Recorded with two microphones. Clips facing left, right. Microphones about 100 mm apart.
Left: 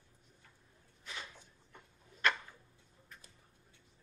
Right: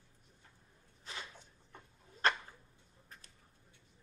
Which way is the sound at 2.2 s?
35° right (ahead or behind).